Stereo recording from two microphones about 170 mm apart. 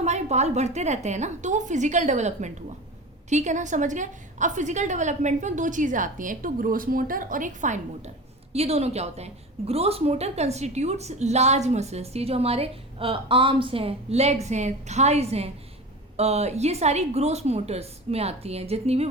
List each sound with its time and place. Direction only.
0.0 s a woman's voice: 40° right (ahead or behind)